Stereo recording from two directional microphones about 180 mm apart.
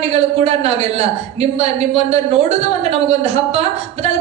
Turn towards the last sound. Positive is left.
turn(degrees=-35)  # may be behind; listen again after turning